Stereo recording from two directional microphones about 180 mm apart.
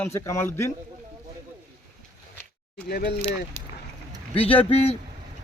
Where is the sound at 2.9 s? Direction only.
65° left (ahead or behind).